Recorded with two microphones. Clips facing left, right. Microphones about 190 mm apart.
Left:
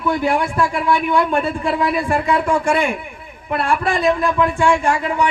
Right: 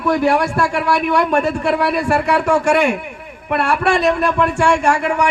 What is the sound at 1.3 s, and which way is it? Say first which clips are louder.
Speech: right 3 dB; 45° right (ahead or behind).